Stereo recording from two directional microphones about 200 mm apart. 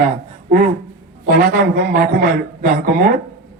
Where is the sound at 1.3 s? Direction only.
50° right (ahead or behind).